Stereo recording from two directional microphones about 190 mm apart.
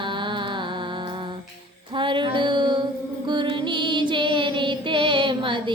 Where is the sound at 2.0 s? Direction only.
25° right (ahead or behind).